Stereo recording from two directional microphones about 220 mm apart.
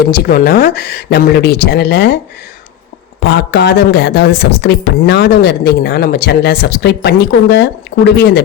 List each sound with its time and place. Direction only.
0.0 s speech: 40° left (ahead or behind)
3.2 s speech: 50° left (ahead or behind)